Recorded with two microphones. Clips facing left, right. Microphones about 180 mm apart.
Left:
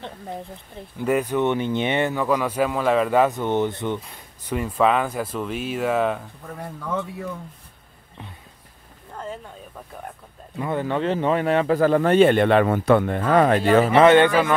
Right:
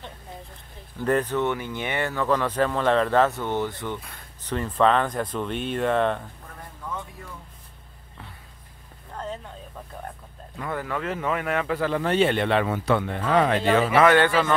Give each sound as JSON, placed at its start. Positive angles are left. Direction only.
{"t": 0.9, "sound": "speech", "side_deg": 10}
{"t": 4.5, "sound": "speech", "side_deg": 10}
{"t": 10.6, "sound": "speech", "side_deg": 25}
{"t": 13.9, "sound": "speech", "side_deg": 25}